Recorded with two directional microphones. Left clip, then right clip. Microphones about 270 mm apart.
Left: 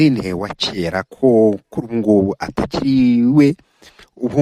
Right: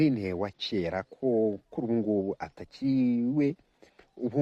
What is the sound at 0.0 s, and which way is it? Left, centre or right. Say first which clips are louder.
Speech: left 11 dB; left.